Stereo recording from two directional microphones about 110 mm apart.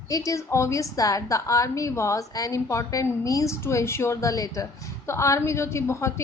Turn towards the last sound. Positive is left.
turn(degrees=25)  # may be behind; listen again after turning